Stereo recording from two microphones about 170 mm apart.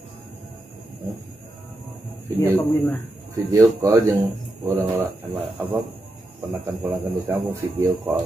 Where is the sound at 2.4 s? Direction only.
10° left (ahead or behind).